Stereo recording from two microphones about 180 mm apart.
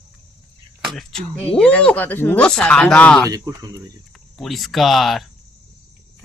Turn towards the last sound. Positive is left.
turn(degrees=0)  # may be behind; listen again after turning